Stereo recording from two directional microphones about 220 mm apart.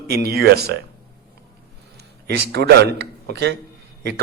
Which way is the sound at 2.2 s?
50° right (ahead or behind).